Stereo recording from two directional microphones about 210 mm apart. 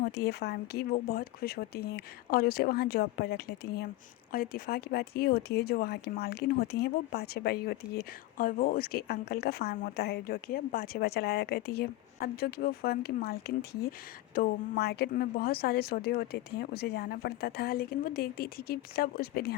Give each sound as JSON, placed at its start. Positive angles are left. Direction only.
{"t": 0.0, "sound": "speech", "side_deg": 50}